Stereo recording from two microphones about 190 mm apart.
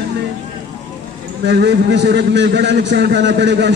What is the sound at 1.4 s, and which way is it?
A man's voice, 60° right (ahead or behind).